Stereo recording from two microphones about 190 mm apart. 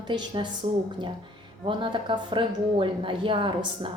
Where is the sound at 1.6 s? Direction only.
25° right (ahead or behind).